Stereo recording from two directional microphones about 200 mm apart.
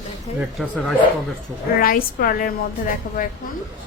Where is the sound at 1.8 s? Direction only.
45° left (ahead or behind).